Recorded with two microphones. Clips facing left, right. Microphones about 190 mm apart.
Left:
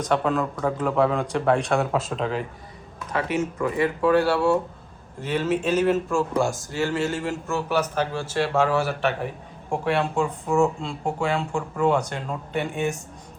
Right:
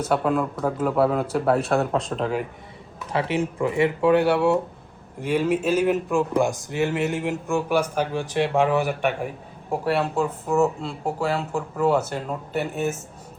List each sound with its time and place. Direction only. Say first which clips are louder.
0.0 s speech: right 1 dB; 5° right (ahead or behind)
3.1 s speech: right 1 dB; 25° right (ahead or behind)
5.2 s speech: right 2 dB; 10° right (ahead or behind)